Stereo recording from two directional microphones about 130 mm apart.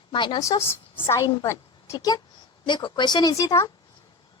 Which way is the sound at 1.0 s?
25° left (ahead or behind).